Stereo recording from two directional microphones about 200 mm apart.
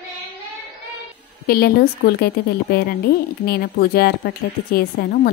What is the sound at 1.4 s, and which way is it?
Speech, 50° left (ahead or behind).